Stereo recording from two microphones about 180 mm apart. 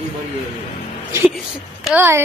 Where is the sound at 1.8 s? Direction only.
10° right (ahead or behind).